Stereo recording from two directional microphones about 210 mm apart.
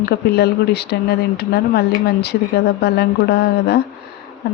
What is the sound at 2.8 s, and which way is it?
Speech, 50° left (ahead or behind).